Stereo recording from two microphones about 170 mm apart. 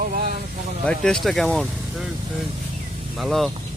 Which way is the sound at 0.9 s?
5° left (ahead or behind).